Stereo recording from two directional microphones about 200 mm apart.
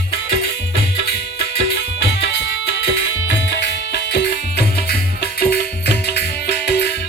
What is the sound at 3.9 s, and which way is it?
Music, 55° left (ahead or behind).